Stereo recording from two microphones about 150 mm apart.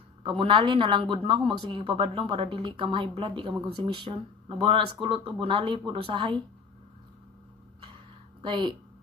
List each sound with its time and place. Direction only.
0.2 s a woman's voice: 35° right (ahead or behind)
8.4 s speech: 30° right (ahead or behind)